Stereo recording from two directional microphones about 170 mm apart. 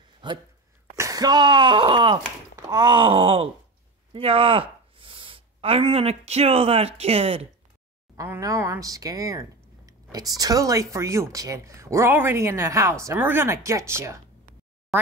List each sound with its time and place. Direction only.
0.2 s speech: 25° right (ahead or behind)
2.7 s groan: 25° right (ahead or behind)
4.1 s speech: 35° right (ahead or behind)
8.2 s speech: 20° right (ahead or behind)